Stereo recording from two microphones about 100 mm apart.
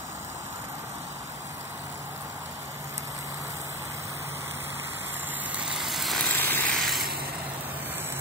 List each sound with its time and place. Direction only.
5.7 s vehicle: centre (ahead or behind)
6.3 s vehicle: 20° left (ahead or behind)
6.7 s a sound: centre (ahead or behind)